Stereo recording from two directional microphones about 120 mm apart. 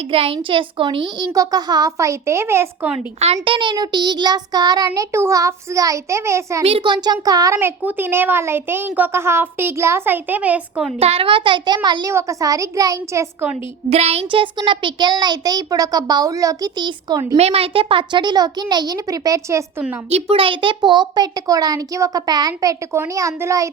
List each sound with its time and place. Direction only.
0.0 s a child's voice: 50° right (ahead or behind); by 2.6 s 20° right (ahead or behind)
2.8 s a child's voice: 5° right (ahead or behind)
3.2 s a woman's voice: 65° right (ahead or behind)
3.4 s a child's voice: 45° right (ahead or behind); by 6.7 s 25° right (ahead or behind)
6.7 s a child's voice: 45° right (ahead or behind); by 7.7 s 25° right (ahead or behind)
7.8 s a child's voice: 15° right (ahead or behind)
11.0 s a child's voice: 55° right (ahead or behind); by 12.1 s 35° right (ahead or behind)
12.1 s a child's voice: 25° right (ahead or behind)
13.9 s a child's voice: 60° right (ahead or behind); by 17.2 s 35° right (ahead or behind)
17.3 s a child's voice: 60° right (ahead or behind); by 19.6 s 25° right (ahead or behind)
20.1 s a child's voice: 55° right (ahead or behind); by 23.6 s 25° right (ahead or behind)